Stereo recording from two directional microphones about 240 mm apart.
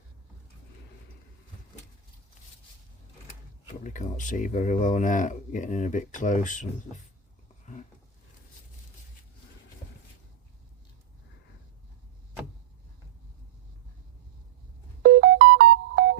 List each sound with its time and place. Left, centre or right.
3.7 s speech: left
15.0 s music: right